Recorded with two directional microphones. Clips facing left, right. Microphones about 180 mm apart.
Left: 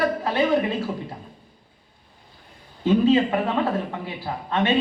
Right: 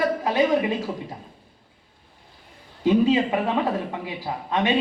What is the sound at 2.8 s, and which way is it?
A man's voice, 15° right (ahead or behind).